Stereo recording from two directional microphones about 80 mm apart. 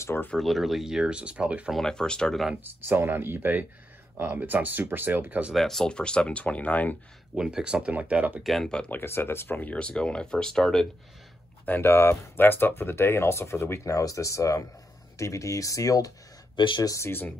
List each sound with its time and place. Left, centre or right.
0.0 s speech: left
0.4 s speech: centre
1.7 s speech: centre
2.5 s speech: right
5.5 s speech: centre
7.3 s speech: centre
8.5 s speech: centre
8.9 s speech: left; by 10.9 s centre
11.6 s speech: left
16.5 s speech: left
16.8 s speech: left